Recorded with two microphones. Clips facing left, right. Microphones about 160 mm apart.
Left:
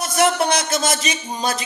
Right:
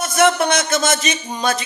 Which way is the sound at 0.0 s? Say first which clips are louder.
Right 2 dB; 35° left (ahead or behind).